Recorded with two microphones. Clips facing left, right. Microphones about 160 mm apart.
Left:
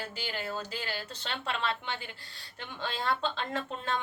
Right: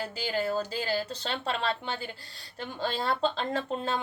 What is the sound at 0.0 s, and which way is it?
Speech, 40° right (ahead or behind).